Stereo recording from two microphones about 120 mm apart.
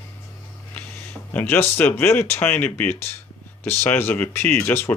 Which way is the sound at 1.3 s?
15° left (ahead or behind).